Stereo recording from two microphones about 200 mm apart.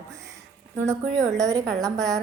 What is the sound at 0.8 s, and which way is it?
Speech, 15° right (ahead or behind).